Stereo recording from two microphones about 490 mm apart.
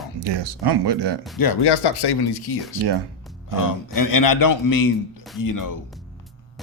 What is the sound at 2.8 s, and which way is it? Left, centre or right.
Speech, right.